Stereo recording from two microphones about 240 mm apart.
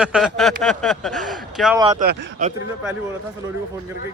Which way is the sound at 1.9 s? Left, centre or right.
Right.